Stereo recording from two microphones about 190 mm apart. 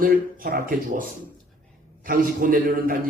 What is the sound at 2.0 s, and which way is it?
Speech, 50° right (ahead or behind).